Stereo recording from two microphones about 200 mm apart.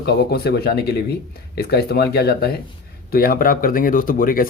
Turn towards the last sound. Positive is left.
turn(degrees=45)  # may be behind; listen again after turning